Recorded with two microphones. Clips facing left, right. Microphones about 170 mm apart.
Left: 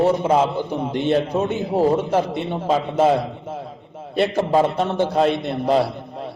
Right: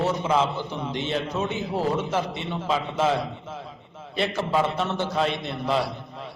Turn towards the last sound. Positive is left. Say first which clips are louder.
# left 6 dB
turn(degrees=50)  # may be behind; listen again after turning